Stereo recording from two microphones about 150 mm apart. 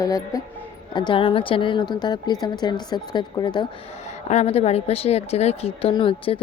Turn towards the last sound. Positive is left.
turn(degrees=35)  # may be behind; listen again after turning